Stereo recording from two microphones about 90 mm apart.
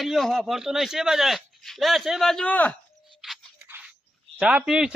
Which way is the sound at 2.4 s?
15° left (ahead or behind).